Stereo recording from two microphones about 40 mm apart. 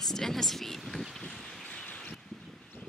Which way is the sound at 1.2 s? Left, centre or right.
Centre.